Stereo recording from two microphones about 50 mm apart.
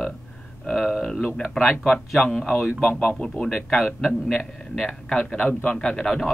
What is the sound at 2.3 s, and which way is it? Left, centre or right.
A man's voice, centre.